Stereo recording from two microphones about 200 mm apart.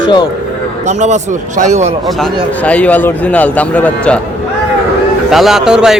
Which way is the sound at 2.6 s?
5° left (ahead or behind).